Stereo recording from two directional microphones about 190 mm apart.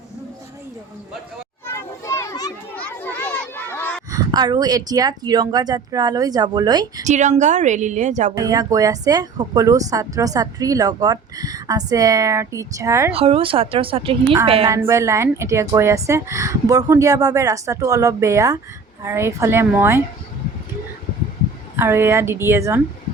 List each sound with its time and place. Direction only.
1.6 s children playing: 15° left (ahead or behind)
2.7 s a sound: 10° left (ahead or behind)
4.1 s speech: 20° right (ahead or behind)
7.0 s a woman's voice: 40° right (ahead or behind)
8.4 s speech: 20° right (ahead or behind)
13.1 s speech: 30° right (ahead or behind)
14.7 s a woman's voice: 15° right (ahead or behind)
21.8 s a woman's voice: 10° right (ahead or behind)